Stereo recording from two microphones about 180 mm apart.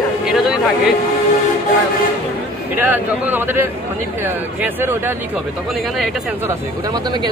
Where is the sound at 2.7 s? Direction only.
10° right (ahead or behind).